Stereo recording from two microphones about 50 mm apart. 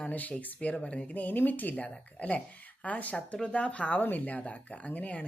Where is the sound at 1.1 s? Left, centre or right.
Left.